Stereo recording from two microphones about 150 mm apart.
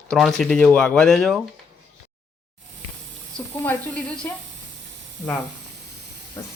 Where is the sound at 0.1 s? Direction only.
5° left (ahead or behind).